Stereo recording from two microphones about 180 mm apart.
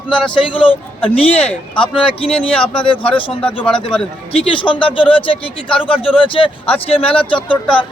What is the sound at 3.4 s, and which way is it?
Speech, 5° left (ahead or behind).